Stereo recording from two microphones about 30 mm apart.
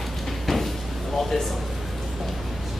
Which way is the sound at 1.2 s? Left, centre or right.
Centre.